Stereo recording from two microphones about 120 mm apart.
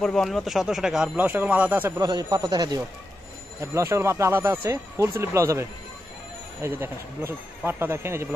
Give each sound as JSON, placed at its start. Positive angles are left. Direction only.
{"t": 0.0, "sound": "speech", "side_deg": 5}
{"t": 2.0, "sound": "speech", "side_deg": -30}
{"t": 3.7, "sound": "speech", "side_deg": -25}